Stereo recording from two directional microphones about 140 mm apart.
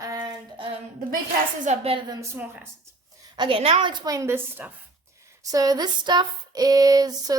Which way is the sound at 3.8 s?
30° right (ahead or behind).